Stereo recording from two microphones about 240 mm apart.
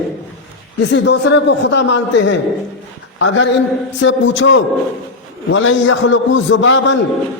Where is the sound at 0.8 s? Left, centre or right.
Left.